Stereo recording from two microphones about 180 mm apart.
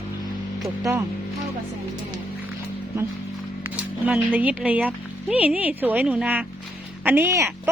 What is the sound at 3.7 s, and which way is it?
A woman's voice, 10° right (ahead or behind).